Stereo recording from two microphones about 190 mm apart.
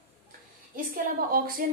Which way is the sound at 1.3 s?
50° right (ahead or behind).